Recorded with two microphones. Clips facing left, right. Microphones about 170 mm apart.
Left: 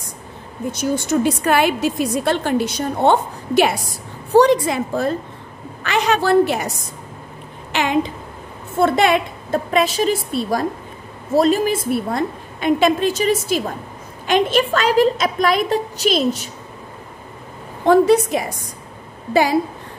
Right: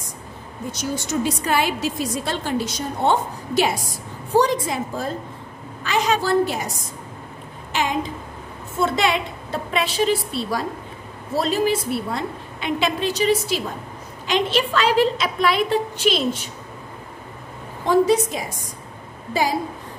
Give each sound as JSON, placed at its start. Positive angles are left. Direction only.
{"t": 0.7, "sound": "a woman's voice", "side_deg": 55}
{"t": 7.7, "sound": "a woman's voice", "side_deg": 70}
{"t": 8.8, "sound": "a woman's voice", "side_deg": 55}
{"t": 17.8, "sound": "a woman's voice", "side_deg": 60}